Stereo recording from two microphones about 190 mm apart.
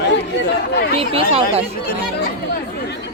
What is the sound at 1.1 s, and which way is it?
Speech, 30° right (ahead or behind).